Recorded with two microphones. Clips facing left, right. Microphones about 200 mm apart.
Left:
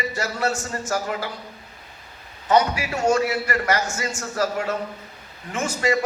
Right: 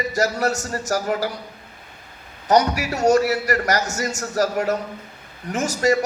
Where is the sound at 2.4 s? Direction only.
40° right (ahead or behind).